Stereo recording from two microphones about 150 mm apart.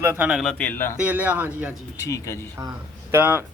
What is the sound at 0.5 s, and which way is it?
Speech, 10° left (ahead or behind).